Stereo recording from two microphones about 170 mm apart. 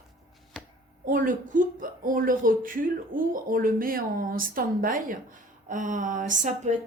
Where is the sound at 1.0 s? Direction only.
55° right (ahead or behind).